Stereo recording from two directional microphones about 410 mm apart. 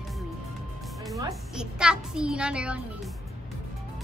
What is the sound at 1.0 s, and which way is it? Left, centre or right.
A child's voice, centre.